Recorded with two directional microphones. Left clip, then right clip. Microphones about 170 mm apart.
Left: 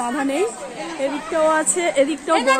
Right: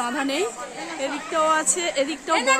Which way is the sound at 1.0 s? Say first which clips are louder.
Left 3 dB; centre (ahead or behind).